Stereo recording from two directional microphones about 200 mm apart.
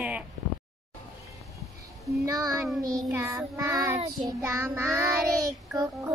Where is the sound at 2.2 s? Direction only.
20° right (ahead or behind).